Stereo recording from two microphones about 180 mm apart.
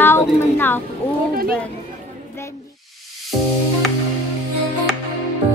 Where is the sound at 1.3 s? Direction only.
55° right (ahead or behind).